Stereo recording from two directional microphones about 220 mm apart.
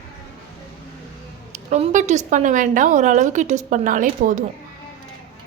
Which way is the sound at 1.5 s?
35° right (ahead or behind).